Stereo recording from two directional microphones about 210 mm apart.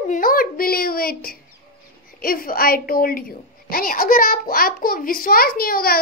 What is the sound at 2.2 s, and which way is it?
A woman's voice, 45° left (ahead or behind).